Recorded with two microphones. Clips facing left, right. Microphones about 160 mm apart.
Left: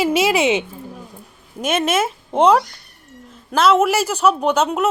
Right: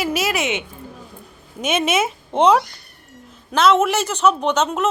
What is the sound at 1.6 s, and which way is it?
A woman's voice, centre (ahead or behind).